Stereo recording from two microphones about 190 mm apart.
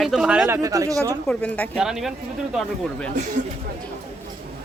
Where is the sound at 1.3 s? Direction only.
5° left (ahead or behind).